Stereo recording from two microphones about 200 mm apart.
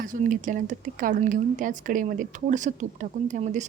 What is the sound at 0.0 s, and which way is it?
A woman's voice, 40° right (ahead or behind).